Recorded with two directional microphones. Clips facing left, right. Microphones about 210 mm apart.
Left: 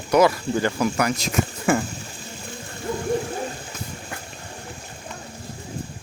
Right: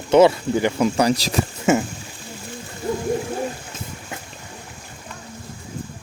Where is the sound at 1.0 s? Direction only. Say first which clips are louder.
Right 4 dB; 35° right (ahead or behind).